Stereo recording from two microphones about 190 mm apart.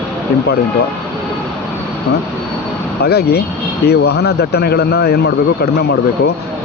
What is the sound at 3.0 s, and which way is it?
Speech, 55° left (ahead or behind).